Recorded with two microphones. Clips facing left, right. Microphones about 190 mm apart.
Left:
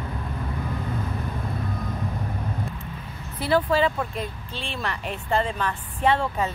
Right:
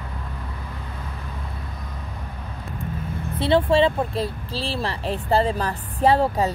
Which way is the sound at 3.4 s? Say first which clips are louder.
Right 3 dB; 30° right (ahead or behind).